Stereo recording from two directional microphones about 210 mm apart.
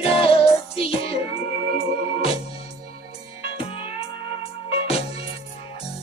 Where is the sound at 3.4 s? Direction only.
25° left (ahead or behind).